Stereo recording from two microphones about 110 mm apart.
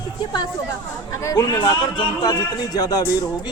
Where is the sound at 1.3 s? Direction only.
35° left (ahead or behind).